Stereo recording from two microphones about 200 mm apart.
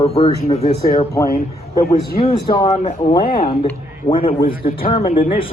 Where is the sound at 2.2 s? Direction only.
20° left (ahead or behind).